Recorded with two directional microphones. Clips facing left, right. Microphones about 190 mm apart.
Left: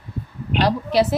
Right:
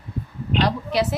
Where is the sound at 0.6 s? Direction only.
35° left (ahead or behind).